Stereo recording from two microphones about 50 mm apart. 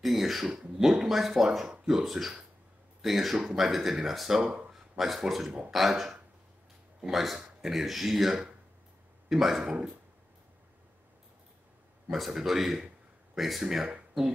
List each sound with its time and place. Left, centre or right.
0.0 s speech: centre
4.9 s speech: centre
9.6 s speech: centre
12.1 s speech: centre